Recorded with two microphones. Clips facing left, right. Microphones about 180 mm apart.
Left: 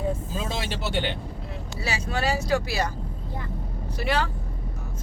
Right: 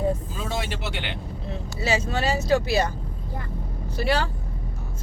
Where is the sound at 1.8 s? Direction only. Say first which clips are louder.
Right 3 dB; 25° right (ahead or behind).